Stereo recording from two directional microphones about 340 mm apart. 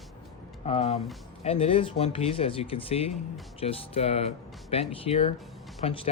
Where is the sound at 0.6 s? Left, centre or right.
Centre.